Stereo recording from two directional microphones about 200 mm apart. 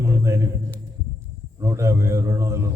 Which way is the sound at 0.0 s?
15° right (ahead or behind).